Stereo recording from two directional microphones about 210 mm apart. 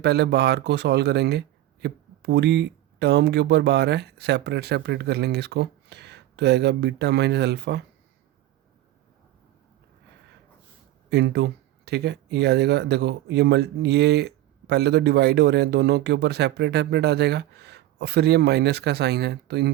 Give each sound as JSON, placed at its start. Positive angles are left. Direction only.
{"t": 0.0, "sound": "speech", "side_deg": -50}
{"t": 11.1, "sound": "speech", "side_deg": -50}